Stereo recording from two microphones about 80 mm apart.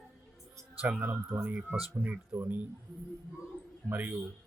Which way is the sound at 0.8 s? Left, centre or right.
Centre.